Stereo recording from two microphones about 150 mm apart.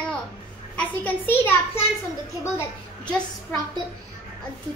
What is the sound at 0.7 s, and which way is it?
Speech, 10° left (ahead or behind).